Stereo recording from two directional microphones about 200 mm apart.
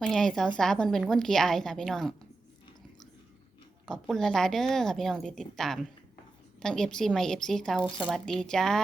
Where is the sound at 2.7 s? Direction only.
20° left (ahead or behind).